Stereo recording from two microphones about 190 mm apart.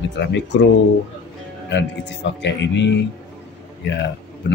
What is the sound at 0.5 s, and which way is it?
Speech, 70° left (ahead or behind).